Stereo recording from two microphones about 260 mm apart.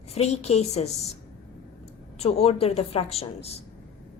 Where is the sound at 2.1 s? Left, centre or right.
Left.